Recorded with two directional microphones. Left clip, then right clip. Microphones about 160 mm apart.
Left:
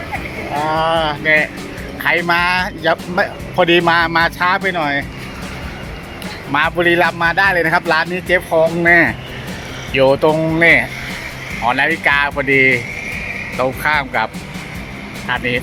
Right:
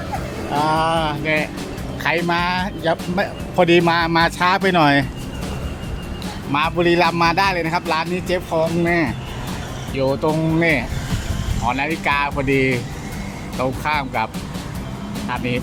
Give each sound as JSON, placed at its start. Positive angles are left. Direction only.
{"t": 0.6, "sound": "speech", "side_deg": -15}
{"t": 4.6, "sound": "speech", "side_deg": -45}
{"t": 6.5, "sound": "speech", "side_deg": 0}
{"t": 7.1, "sound": "speech", "side_deg": -15}
{"t": 10.6, "sound": "speech", "side_deg": -10}
{"t": 15.3, "sound": "speech", "side_deg": -5}